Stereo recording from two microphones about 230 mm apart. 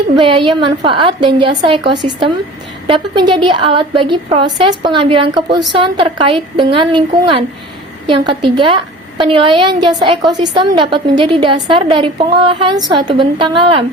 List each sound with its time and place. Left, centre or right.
0.2 s a woman's voice: right